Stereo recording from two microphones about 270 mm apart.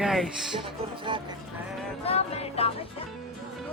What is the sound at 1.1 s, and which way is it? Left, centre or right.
Speech, centre.